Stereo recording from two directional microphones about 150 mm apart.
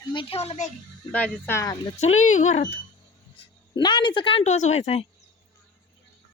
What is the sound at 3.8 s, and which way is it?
A woman's voice, 30° left (ahead or behind).